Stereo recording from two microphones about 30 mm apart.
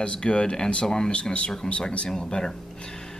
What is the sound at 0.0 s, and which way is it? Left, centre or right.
Speech, left.